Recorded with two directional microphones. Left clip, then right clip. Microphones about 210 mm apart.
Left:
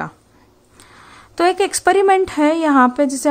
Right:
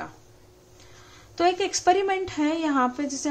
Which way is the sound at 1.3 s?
50° left (ahead or behind).